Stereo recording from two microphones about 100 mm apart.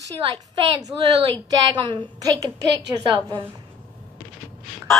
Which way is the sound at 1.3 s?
50° right (ahead or behind).